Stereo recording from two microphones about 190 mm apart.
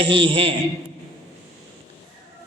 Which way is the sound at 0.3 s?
30° right (ahead or behind).